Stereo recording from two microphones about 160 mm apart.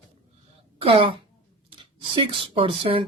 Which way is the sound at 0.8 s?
35° right (ahead or behind).